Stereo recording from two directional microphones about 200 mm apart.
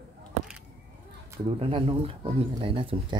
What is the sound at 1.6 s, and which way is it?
Speech, 25° right (ahead or behind).